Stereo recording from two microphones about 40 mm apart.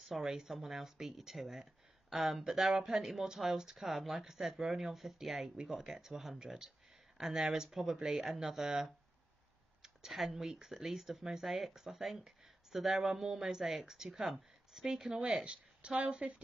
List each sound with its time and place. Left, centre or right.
0.1 s speech: centre
15.1 s speech: right